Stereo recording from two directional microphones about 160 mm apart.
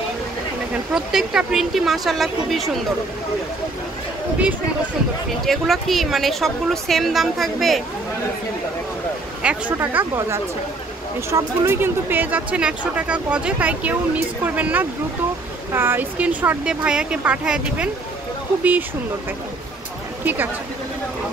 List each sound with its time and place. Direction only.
0.9 s a woman's voice: 5° right (ahead or behind)
5.4 s a woman's voice: centre (ahead or behind)
9.4 s speech: 10° right (ahead or behind)